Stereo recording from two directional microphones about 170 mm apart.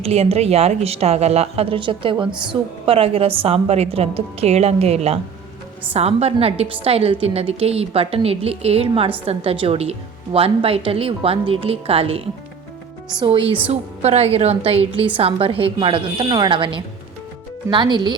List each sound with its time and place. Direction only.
0.0 s a woman's voice: 35° right (ahead or behind)